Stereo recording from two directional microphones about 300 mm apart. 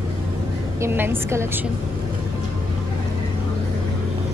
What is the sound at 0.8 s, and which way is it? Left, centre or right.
Speech, centre.